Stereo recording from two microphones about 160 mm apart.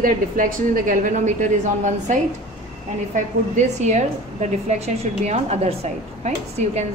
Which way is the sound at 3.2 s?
45° right (ahead or behind).